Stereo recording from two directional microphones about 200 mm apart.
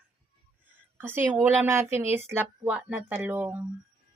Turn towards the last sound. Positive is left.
turn(degrees=-10)  # may be behind; listen again after turning